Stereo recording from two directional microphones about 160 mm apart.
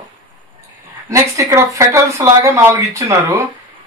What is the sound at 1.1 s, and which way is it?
Speech, 20° right (ahead or behind).